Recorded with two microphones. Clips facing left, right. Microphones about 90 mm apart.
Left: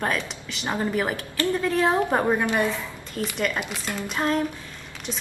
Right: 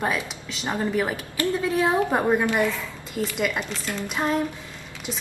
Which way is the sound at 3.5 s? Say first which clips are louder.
Even; 10° left (ahead or behind).